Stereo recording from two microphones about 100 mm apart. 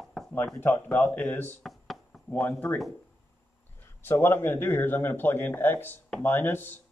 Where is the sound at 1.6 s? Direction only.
Centre (ahead or behind).